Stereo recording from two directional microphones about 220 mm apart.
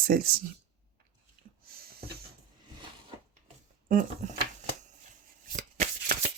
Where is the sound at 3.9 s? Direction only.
40° right (ahead or behind).